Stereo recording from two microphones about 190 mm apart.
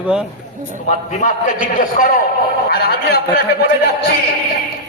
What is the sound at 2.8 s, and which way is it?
A man's voice, 60° left (ahead or behind).